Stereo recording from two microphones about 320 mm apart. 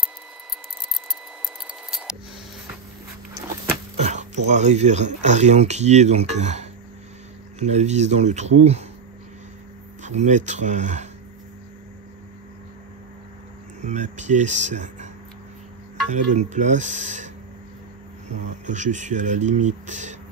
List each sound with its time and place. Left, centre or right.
1.9 s a sound: centre
3.9 s speech: right
10.0 s speech: right
13.8 s speech: right
16.1 s speech: right
18.7 s speech: right